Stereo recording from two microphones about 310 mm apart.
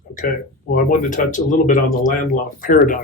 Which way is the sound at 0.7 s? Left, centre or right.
Left.